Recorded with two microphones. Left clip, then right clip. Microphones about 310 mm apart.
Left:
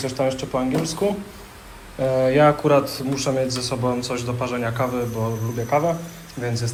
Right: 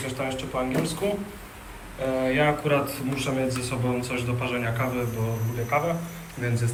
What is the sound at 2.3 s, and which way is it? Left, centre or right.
Speech, left.